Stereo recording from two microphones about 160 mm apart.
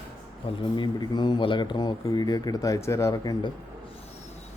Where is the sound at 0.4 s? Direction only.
30° left (ahead or behind).